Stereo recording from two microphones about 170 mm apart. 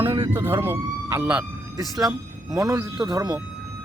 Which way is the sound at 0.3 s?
10° right (ahead or behind).